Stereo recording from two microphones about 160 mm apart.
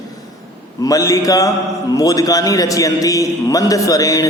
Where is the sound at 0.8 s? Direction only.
20° left (ahead or behind).